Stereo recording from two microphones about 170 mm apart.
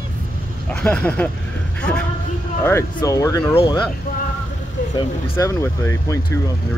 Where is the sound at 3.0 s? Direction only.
20° left (ahead or behind).